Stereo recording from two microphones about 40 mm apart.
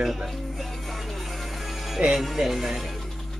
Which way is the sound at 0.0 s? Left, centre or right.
Centre.